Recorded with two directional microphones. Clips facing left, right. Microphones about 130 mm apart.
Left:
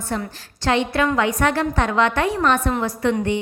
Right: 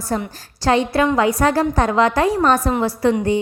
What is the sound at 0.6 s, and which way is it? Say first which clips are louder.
A woman's voice: right 3 dB; 35° right (ahead or behind).